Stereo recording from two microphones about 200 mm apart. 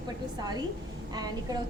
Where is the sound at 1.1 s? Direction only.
20° right (ahead or behind).